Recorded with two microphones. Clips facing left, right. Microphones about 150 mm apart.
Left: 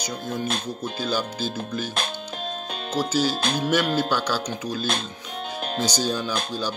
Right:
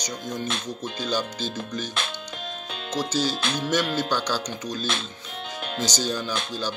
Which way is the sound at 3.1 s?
10° left (ahead or behind).